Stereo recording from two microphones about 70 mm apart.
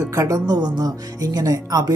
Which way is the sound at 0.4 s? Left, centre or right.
Right.